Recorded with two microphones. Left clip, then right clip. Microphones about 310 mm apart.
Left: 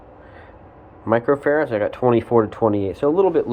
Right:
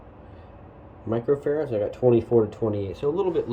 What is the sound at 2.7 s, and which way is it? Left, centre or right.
Speech, centre.